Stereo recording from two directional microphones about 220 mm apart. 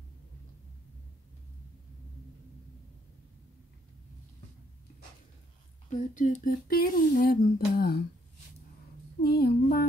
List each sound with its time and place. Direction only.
5.9 s speech: 35° left (ahead or behind)
9.2 s female singing: 45° left (ahead or behind)